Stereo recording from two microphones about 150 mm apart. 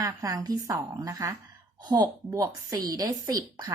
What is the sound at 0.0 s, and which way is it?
A woman's voice, 25° right (ahead or behind).